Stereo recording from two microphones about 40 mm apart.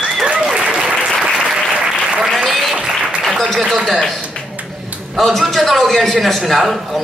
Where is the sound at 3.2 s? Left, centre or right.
Centre.